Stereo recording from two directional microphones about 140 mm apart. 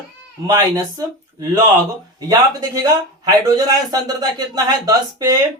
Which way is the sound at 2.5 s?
25° right (ahead or behind).